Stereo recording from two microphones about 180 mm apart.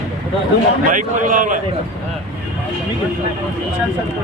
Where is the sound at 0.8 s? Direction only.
45° right (ahead or behind).